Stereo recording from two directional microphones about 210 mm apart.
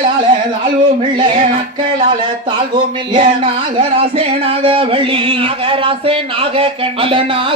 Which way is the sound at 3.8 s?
25° right (ahead or behind).